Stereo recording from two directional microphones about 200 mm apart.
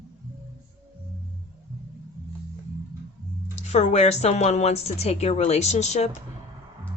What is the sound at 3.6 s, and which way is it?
Speech, 35° left (ahead or behind).